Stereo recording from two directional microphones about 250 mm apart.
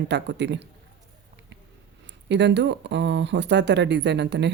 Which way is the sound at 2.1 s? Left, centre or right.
Right.